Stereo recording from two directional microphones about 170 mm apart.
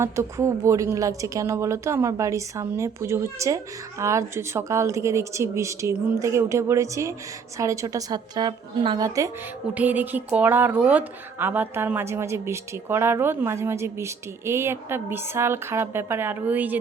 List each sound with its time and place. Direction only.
0.0 s a woman's voice: 15° right (ahead or behind)